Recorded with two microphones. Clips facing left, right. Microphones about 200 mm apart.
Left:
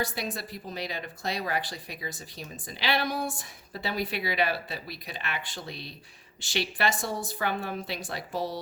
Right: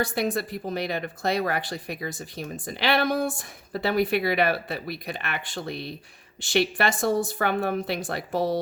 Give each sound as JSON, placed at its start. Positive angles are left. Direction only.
{"t": 0.0, "sound": "speech", "side_deg": -50}